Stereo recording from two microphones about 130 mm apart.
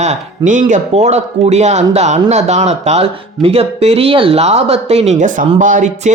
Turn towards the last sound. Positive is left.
turn(degrees=-75)  # may be behind; listen again after turning